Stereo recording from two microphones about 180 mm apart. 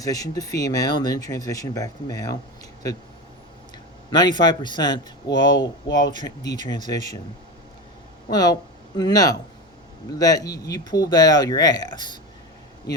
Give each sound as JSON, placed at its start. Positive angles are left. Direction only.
{"t": 0.0, "sound": "speech", "side_deg": 20}
{"t": 4.1, "sound": "speech", "side_deg": 25}
{"t": 8.3, "sound": "speech", "side_deg": 20}